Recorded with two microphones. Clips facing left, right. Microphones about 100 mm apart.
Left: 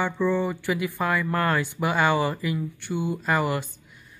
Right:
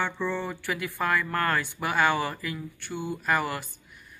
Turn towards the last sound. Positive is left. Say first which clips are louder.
# left 3 dB
turn(degrees=20)  # may be behind; listen again after turning